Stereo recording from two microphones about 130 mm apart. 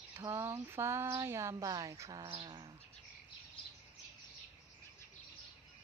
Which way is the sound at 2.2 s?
35° right (ahead or behind).